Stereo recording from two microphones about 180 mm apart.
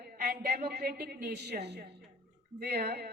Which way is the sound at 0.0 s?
60° right (ahead or behind).